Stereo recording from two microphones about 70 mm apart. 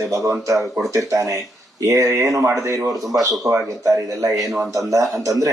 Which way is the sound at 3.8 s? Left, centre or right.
Right.